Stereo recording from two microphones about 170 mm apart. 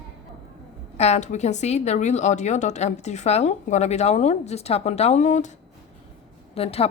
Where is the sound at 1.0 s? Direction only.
40° left (ahead or behind).